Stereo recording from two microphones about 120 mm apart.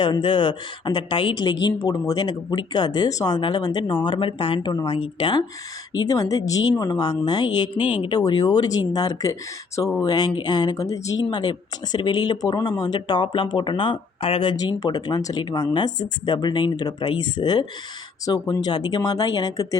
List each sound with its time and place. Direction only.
0.0 s a woman's voice: 40° left (ahead or behind)
6.1 s a woman's voice: 30° left (ahead or behind); by 14.5 s 50° left (ahead or behind)
14.5 s a woman's voice: 30° left (ahead or behind)